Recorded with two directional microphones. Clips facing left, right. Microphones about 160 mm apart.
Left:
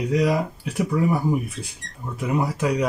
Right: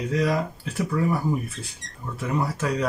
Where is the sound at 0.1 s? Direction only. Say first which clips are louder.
Left 3 dB; 15° left (ahead or behind).